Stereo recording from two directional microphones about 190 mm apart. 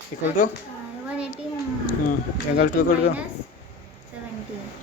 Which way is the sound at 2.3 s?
60° left (ahead or behind).